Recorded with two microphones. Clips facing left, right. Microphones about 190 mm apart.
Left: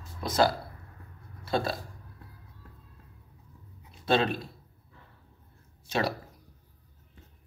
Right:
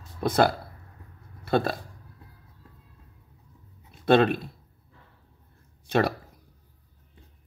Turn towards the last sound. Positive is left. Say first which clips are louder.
# right 6 dB
turn(degrees=-55)  # may be behind; listen again after turning